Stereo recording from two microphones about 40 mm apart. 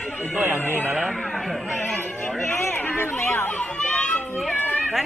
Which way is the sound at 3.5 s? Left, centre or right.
Left.